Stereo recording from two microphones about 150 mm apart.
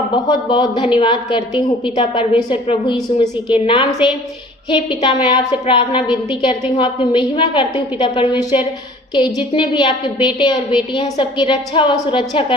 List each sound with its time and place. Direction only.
0.3 s a woman's voice: 30° left (ahead or behind)